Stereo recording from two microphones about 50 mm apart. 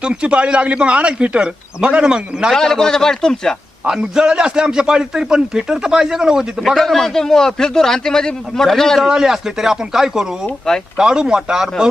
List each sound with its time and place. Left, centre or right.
0.0 s a man's voice: centre
2.6 s a man's voice: centre
3.8 s a man's voice: centre
6.7 s a man's voice: centre
9.0 s a man's voice: centre